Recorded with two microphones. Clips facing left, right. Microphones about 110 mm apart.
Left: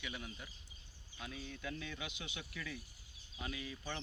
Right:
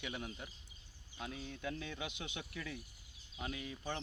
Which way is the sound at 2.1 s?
50° right (ahead or behind).